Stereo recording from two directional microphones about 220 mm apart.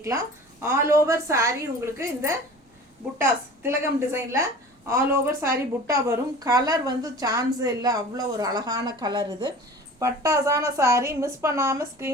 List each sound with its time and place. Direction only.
0.0 s a woman's voice: 15° right (ahead or behind)